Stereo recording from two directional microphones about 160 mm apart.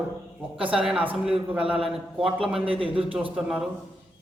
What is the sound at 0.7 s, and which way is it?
A man's voice, 5° right (ahead or behind).